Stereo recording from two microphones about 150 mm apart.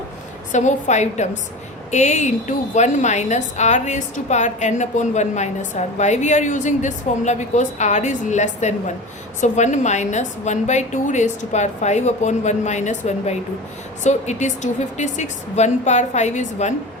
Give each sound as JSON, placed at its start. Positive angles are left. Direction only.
{"t": 0.5, "sound": "a woman's voice", "side_deg": 50}